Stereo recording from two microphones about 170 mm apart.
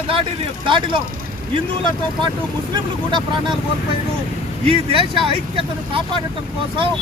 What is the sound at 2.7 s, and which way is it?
Speech, 30° right (ahead or behind).